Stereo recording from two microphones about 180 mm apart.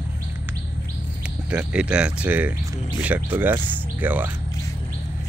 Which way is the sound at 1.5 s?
5° right (ahead or behind).